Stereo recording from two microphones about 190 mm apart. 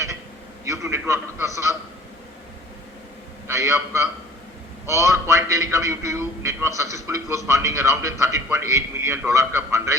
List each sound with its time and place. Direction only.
0.6 s a man's voice: 15° right (ahead or behind)
3.4 s a man's voice: 15° right (ahead or behind)